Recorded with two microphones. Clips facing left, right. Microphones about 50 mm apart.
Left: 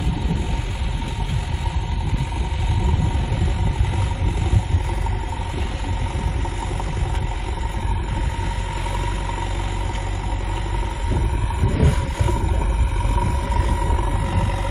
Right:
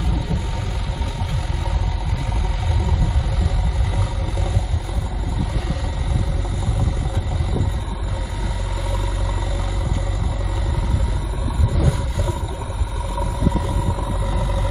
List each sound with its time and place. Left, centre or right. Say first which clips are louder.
11.7 s vehicle: left 2 dB; left